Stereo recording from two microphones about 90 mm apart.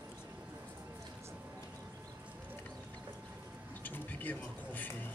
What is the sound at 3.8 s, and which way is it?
Speech, 20° left (ahead or behind).